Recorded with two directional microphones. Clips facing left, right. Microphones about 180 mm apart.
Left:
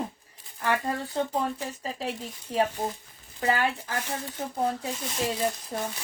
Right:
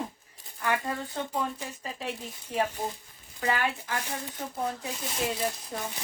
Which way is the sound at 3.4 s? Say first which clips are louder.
Left 3 dB; 35° left (ahead or behind).